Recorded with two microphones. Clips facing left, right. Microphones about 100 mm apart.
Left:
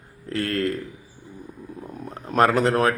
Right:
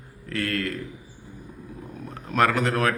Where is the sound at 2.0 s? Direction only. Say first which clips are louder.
Left 3 dB; 35° left (ahead or behind).